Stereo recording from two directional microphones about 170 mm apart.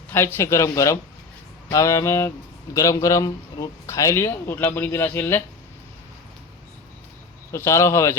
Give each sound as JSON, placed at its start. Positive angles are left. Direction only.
{"t": 0.3, "sound": "speech", "side_deg": 15}
{"t": 7.5, "sound": "speech", "side_deg": 15}